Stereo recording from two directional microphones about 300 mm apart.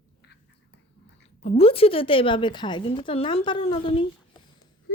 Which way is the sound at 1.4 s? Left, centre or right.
Centre.